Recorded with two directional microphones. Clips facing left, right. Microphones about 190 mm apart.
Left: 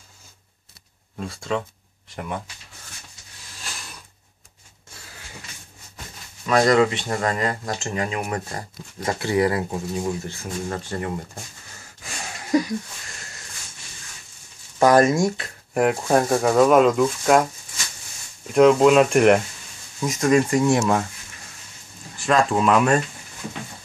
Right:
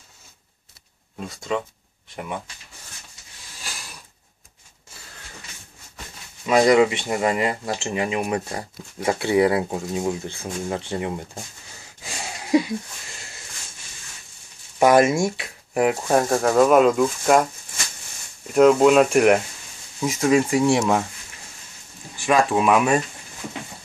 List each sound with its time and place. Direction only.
1.1 s speech: centre (ahead or behind)
6.4 s speech: 15° right (ahead or behind)
12.4 s a sound: 5° right (ahead or behind)
14.8 s speech: 15° right (ahead or behind)
15.2 s speech: 5° right (ahead or behind)
18.5 s speech: centre (ahead or behind)
22.2 s speech: 10° right (ahead or behind)